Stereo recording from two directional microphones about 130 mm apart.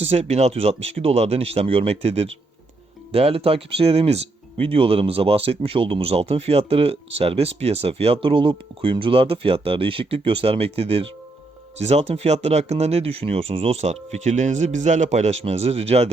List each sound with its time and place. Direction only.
0.0 s speech: 55° right (ahead or behind)